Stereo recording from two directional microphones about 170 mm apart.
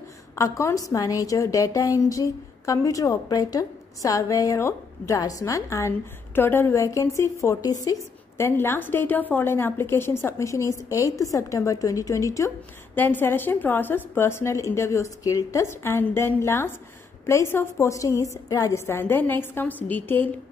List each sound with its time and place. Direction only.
0.4 s a woman's voice: 15° left (ahead or behind)